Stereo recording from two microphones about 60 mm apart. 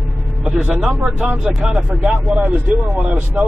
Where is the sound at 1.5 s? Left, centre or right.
Centre.